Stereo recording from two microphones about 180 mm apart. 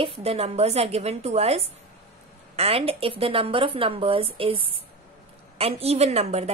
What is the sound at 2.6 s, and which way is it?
A woman's voice, 35° right (ahead or behind).